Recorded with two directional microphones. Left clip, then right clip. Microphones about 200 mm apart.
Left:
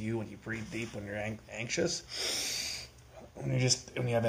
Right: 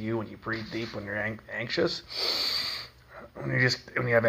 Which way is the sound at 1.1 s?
Centre (ahead or behind).